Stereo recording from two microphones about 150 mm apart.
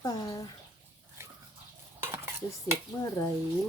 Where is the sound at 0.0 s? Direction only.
25° left (ahead or behind).